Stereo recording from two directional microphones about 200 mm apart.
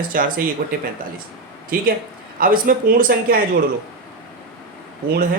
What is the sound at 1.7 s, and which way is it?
A man's voice, 45° right (ahead or behind).